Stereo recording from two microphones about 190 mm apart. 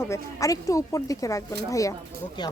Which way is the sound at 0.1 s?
15° left (ahead or behind).